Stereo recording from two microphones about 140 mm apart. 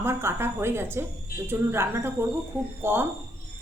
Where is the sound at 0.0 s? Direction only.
15° right (ahead or behind).